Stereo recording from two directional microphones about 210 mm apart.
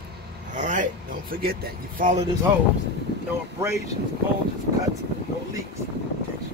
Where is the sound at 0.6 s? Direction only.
35° right (ahead or behind).